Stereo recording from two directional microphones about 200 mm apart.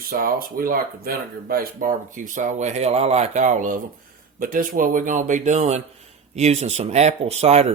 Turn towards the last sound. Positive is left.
turn(degrees=-30)  # may be behind; listen again after turning